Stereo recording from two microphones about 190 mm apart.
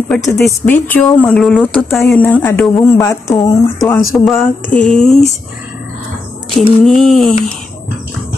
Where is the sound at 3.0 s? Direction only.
15° left (ahead or behind).